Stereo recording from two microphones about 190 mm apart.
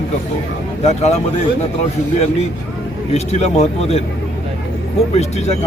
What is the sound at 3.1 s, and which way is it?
Speech, 35° left (ahead or behind).